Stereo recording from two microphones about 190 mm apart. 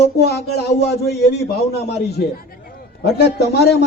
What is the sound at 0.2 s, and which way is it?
A man's voice, 60° left (ahead or behind).